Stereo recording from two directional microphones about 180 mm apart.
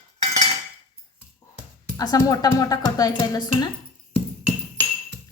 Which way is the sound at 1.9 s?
20° left (ahead or behind).